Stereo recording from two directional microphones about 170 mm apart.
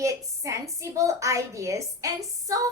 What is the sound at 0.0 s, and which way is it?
A woman's voice, 20° right (ahead or behind).